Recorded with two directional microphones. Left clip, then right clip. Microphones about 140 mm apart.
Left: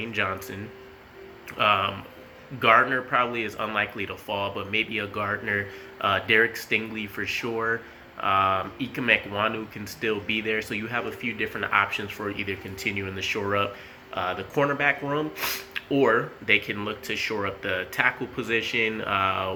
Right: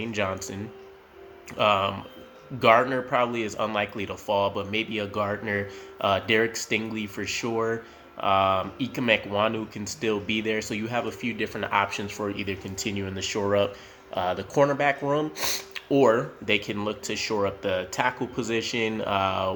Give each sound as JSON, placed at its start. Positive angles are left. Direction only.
{"t": 0.0, "sound": "speech", "side_deg": -35}